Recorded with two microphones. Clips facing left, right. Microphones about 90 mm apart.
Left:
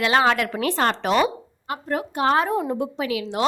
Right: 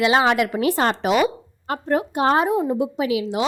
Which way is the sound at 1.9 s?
25° right (ahead or behind).